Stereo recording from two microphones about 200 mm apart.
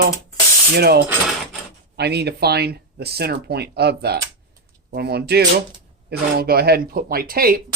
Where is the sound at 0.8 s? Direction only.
50° right (ahead or behind).